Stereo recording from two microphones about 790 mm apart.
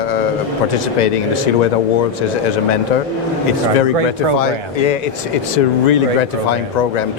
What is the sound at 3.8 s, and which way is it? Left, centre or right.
A man's voice, left.